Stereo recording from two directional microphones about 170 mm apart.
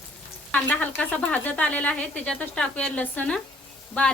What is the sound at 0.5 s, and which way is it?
Speech, 10° left (ahead or behind).